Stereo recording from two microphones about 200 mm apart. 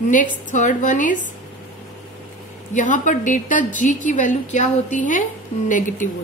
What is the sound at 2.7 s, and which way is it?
A woman's voice, 40° left (ahead or behind).